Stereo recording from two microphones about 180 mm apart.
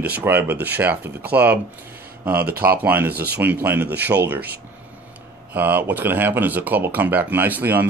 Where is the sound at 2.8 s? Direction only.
10° right (ahead or behind).